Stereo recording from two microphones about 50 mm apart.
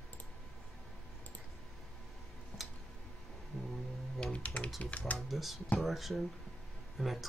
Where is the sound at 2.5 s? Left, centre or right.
Left.